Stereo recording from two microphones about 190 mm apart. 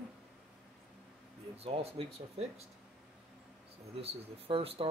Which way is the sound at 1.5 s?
30° right (ahead or behind).